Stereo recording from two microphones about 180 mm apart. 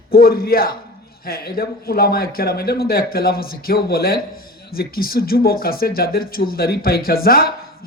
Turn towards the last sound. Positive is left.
turn(degrees=55)  # may be behind; listen again after turning